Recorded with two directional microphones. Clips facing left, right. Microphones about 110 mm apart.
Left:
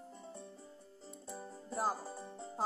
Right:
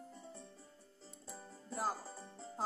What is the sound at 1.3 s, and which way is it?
Music, 15° left (ahead or behind).